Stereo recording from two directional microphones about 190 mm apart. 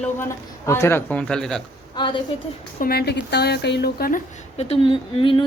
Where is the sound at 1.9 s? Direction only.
25° left (ahead or behind).